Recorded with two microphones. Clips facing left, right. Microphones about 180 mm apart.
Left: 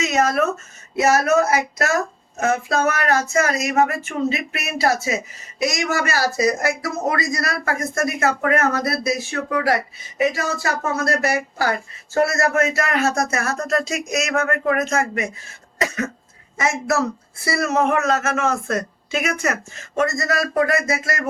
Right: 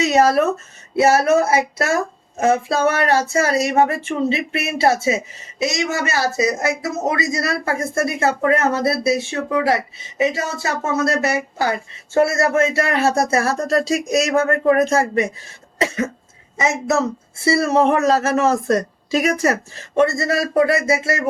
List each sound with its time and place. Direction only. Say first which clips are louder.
0.0 s speech: right 4 dB; 35° right (ahead or behind)